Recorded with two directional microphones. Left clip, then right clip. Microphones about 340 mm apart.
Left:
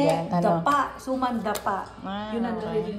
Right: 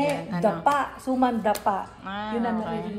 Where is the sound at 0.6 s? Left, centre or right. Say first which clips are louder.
Even; right.